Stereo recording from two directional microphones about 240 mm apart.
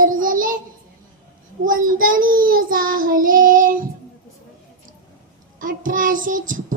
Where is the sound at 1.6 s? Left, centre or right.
Right.